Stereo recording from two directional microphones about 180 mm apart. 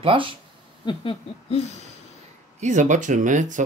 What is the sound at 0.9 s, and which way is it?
Speech, 30° left (ahead or behind).